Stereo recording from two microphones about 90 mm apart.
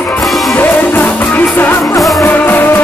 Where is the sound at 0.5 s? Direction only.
20° left (ahead or behind).